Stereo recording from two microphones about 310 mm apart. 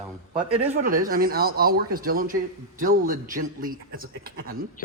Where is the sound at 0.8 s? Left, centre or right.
Right.